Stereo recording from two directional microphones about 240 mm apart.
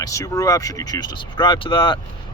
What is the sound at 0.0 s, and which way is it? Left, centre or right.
Speech, centre.